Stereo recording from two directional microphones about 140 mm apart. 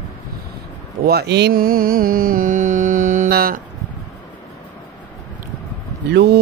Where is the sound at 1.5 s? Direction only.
90° right.